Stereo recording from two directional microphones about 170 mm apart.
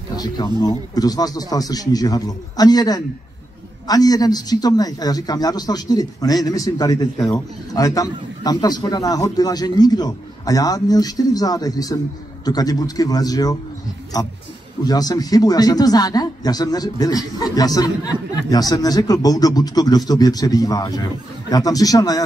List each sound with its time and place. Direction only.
0.1 s a man's voice: 25° left (ahead or behind)